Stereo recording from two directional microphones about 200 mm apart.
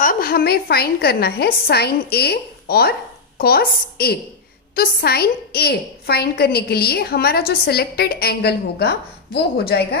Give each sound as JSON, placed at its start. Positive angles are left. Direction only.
{"t": 0.0, "sound": "a woman's voice", "side_deg": 45}